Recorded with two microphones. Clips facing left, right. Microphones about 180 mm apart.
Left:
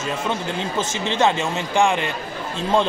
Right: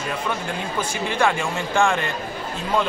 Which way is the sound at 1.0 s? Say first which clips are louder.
Left 2 dB; 25° left (ahead or behind).